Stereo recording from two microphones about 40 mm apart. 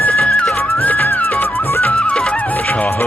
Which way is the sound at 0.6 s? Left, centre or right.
Left.